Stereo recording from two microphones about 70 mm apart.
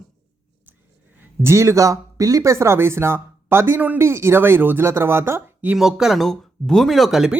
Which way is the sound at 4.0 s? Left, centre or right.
Right.